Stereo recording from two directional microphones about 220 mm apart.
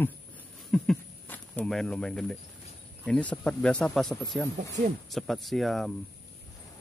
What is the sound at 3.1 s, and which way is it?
Speech, 5° left (ahead or behind).